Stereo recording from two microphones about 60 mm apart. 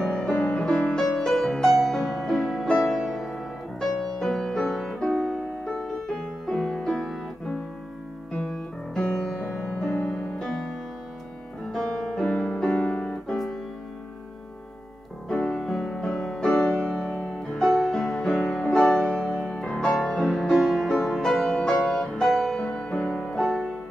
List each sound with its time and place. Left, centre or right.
0.0 s music: centre; by 10.3 s left
10.4 s music: centre
11.7 s piano: centre
15.2 s music: centre
15.6 s music: centre